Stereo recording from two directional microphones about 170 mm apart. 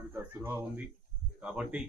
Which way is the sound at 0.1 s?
15° right (ahead or behind).